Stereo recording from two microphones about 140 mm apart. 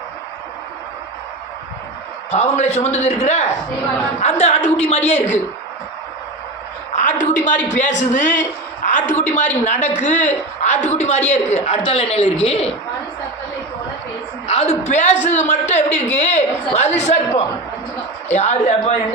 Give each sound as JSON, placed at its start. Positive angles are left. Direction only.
{"t": 2.3, "sound": "a man's voice", "side_deg": 50}
{"t": 6.9, "sound": "a sound", "side_deg": 60}
{"t": 7.8, "sound": "a man's voice", "side_deg": 60}
{"t": 14.4, "sound": "a man's voice", "side_deg": 45}